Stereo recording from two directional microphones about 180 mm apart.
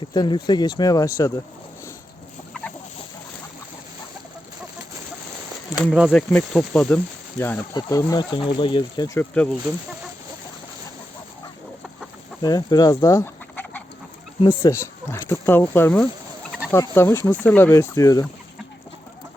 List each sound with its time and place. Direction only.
0.1 s speech: 25° left (ahead or behind)
5.7 s speech: 5° right (ahead or behind); by 9.1 s 25° left (ahead or behind)
9.1 s speech: 5° left (ahead or behind)
12.4 s speech: 20° left (ahead or behind)